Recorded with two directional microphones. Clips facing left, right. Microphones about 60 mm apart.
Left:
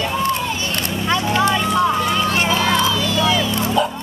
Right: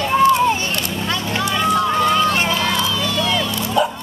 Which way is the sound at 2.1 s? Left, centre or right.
Centre.